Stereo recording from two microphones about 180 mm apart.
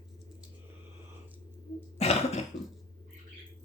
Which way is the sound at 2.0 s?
35° left (ahead or behind).